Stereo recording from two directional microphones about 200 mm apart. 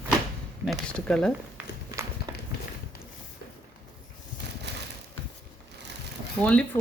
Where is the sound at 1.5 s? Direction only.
15° right (ahead or behind).